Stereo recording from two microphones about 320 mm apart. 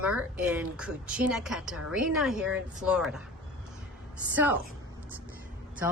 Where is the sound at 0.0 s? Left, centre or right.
Centre.